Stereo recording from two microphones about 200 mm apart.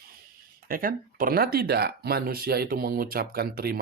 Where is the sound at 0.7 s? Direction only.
45° right (ahead or behind).